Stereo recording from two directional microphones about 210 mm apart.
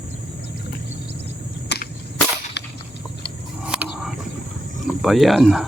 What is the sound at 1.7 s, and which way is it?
Cap gun, 55° left (ahead or behind).